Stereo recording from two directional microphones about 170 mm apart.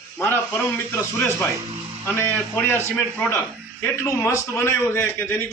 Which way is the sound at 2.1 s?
15° left (ahead or behind).